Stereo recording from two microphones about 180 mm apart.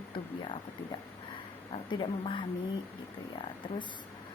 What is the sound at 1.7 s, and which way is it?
Speech, 30° left (ahead or behind).